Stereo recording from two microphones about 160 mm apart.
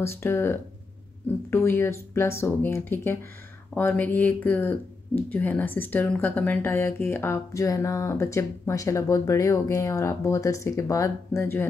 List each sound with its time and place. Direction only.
0.0 s speech: 15° left (ahead or behind)